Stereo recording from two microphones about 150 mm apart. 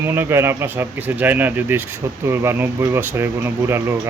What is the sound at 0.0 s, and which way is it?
Speech, 15° right (ahead or behind).